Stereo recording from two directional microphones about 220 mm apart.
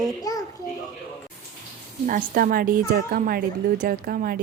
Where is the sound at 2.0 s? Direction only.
40° right (ahead or behind).